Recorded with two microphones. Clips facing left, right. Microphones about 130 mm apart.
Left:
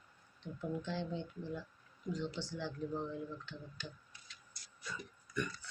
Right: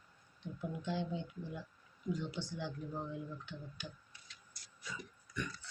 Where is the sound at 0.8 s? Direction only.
15° right (ahead or behind).